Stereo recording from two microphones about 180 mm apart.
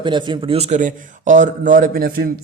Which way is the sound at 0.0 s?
25° right (ahead or behind).